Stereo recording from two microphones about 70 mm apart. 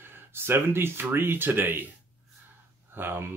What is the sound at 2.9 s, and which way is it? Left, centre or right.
Speech, right.